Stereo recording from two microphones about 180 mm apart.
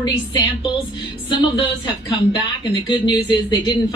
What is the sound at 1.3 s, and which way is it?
Speech, 25° left (ahead or behind).